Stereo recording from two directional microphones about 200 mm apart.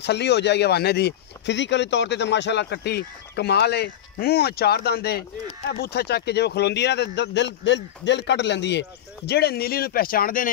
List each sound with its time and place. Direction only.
0.0 s speech: 60° left (ahead or behind)